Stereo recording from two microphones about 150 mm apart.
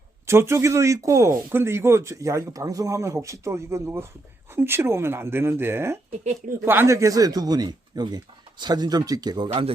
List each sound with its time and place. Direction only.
0.3 s speech: 15° right (ahead or behind)
9.5 s speech: 40° right (ahead or behind)